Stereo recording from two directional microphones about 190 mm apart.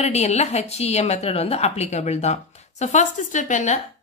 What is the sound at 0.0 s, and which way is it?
A woman's voice, 35° left (ahead or behind).